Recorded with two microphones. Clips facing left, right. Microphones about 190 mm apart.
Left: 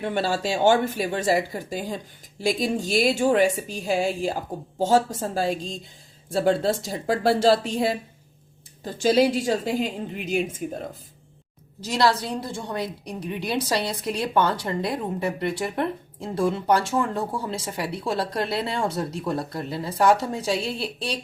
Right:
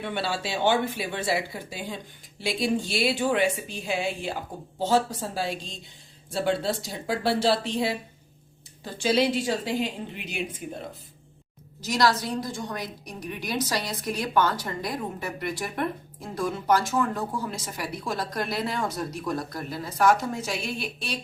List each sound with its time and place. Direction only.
0.0 s speech: 45° left (ahead or behind)
5.5 s a woman's voice: centre (ahead or behind)
6.6 s speech: 45° left (ahead or behind)
11.8 s a woman's voice: 30° left (ahead or behind)